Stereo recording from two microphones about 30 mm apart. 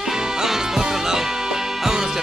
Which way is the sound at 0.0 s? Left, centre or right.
Centre.